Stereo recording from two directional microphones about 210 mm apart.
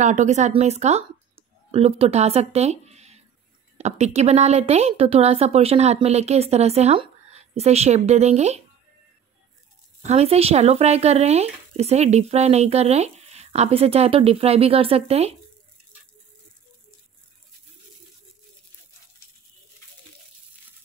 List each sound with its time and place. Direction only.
0.0 s speech: 35° right (ahead or behind)
10.0 s speech: 30° right (ahead or behind)